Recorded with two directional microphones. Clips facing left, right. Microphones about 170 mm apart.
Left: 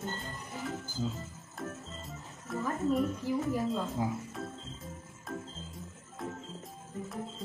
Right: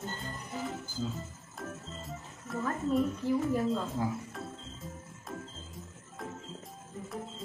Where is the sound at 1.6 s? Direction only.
Centre (ahead or behind).